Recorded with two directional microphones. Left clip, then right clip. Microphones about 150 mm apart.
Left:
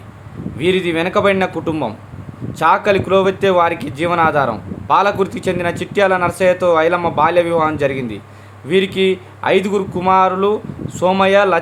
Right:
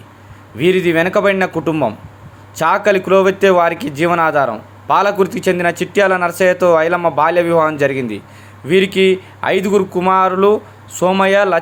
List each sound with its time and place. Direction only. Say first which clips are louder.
0.6 s speech: right 3 dB; 25° right (ahead or behind)